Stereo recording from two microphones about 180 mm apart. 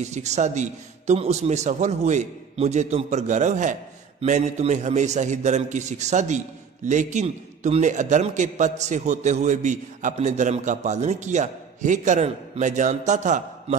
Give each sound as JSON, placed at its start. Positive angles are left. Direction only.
{"t": 0.0, "sound": "a man's voice", "side_deg": -40}